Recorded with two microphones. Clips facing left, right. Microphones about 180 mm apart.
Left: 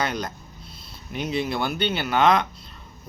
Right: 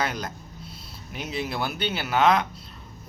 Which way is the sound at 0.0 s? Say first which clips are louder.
Left 2 dB; 5° right (ahead or behind).